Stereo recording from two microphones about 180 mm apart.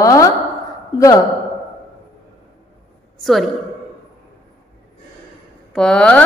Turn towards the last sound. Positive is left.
turn(degrees=5)  # may be behind; listen again after turning